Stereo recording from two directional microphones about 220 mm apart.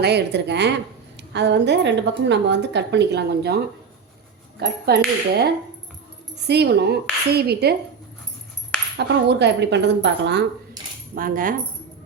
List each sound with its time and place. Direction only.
0.0 s a woman's voice: 50° right (ahead or behind)
4.6 s a woman's voice: 45° right (ahead or behind)
6.5 s a woman's voice: 50° right (ahead or behind)
9.0 s a woman's voice: 50° right (ahead or behind)
11.1 s speech: 40° right (ahead or behind)